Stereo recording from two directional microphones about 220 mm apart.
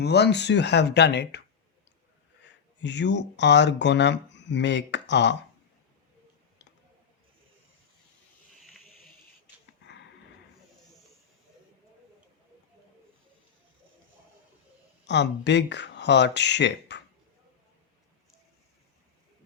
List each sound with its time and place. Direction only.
0.0 s speech: 50° left (ahead or behind)
2.8 s speech: 55° left (ahead or behind)
15.0 s speech: 50° left (ahead or behind)